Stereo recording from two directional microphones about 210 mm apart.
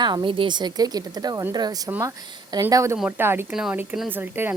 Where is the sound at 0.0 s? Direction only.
20° right (ahead or behind).